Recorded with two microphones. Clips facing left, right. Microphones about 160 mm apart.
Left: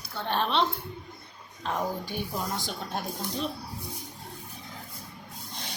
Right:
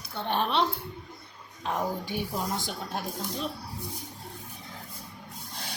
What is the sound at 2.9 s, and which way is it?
Speech, centre (ahead or behind).